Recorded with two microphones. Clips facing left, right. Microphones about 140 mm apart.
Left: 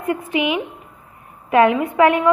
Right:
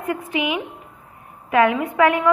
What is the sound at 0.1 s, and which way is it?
A woman's voice, 25° left (ahead or behind).